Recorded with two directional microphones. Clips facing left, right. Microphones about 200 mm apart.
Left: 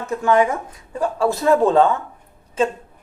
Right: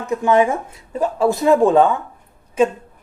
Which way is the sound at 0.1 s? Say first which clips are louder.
Right 2 dB; 20° right (ahead or behind).